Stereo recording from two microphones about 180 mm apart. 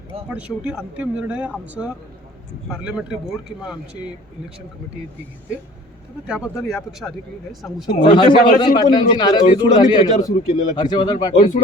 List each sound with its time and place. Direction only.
0.3 s speech: 5° right (ahead or behind)
6.2 s speech: 5° right (ahead or behind)
8.0 s speech: 30° left (ahead or behind)
11.3 s speech: 45° left (ahead or behind)